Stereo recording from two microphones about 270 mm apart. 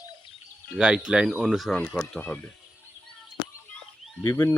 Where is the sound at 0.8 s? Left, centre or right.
Centre.